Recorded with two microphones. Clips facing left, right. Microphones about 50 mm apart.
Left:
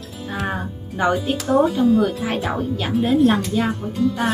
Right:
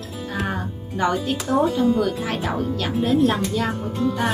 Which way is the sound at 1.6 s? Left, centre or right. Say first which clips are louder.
Left 1 dB; centre.